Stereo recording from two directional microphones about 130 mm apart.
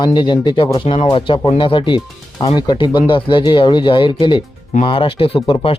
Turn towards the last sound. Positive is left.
turn(degrees=40)  # may be behind; listen again after turning